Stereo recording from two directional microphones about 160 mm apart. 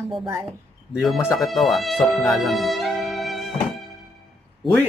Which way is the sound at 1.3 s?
Centre (ahead or behind).